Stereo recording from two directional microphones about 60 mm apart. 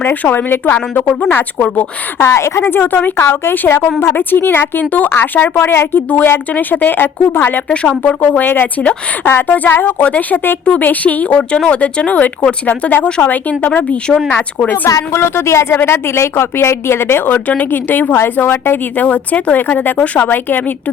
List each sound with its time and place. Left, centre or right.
0.0 s a woman's voice: left
2.1 s a woman's voice: left
5.5 s speech: left
6.5 s a woman's voice: left
7.7 s a woman's voice: centre
14.8 s speech: left
15.2 s a woman's voice: left